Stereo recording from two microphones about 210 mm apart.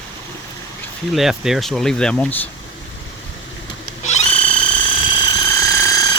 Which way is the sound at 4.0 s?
30° left (ahead or behind).